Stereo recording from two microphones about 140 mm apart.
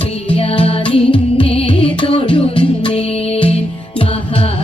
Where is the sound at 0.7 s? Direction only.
40° left (ahead or behind).